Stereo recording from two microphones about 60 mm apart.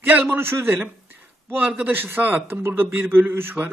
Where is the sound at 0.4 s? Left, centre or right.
Right.